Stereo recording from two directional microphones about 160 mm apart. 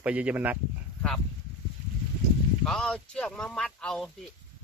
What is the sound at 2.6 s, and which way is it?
Speech, 5° left (ahead or behind).